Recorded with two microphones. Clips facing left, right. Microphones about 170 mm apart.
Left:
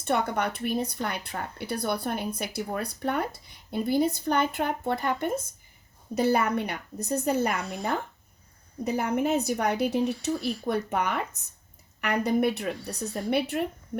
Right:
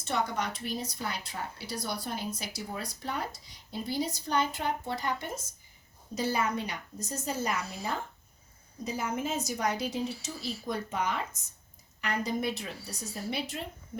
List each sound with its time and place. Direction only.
0.0 s speech: 55° left (ahead or behind)